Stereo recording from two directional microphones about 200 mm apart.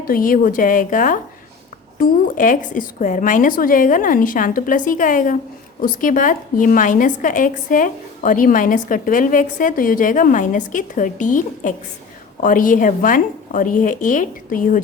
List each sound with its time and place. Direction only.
0.1 s a woman's voice: 45° left (ahead or behind)